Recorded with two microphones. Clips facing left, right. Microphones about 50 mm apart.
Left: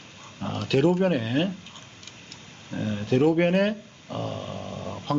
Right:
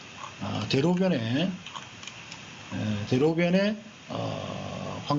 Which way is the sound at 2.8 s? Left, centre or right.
Centre.